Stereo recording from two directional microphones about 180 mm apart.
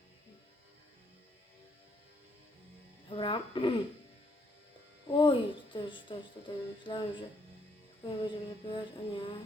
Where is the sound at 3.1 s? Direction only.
25° left (ahead or behind).